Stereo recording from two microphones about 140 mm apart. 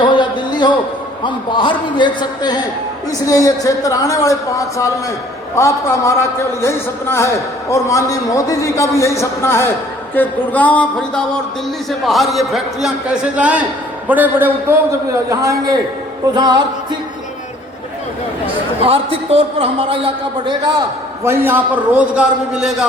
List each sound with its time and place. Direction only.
0.0 s a sound: 35° left (ahead or behind)
1.2 s a man's voice: 35° left (ahead or behind); by 14.5 s 15° right (ahead or behind)
15.3 s a man's voice: 25° right (ahead or behind)
18.9 s a man's voice: 40° right (ahead or behind)
21.2 s a man's voice: 15° right (ahead or behind)